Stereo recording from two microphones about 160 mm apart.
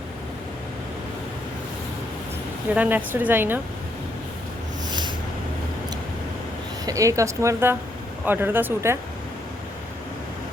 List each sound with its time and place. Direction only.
2.7 s a woman's voice: 10° right (ahead or behind)
4.9 s a sound: 30° right (ahead or behind)
6.8 s a woman's voice: 20° right (ahead or behind)